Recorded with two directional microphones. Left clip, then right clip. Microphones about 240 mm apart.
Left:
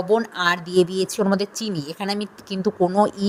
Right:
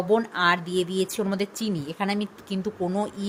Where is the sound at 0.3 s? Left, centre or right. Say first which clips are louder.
Left 3 dB; left.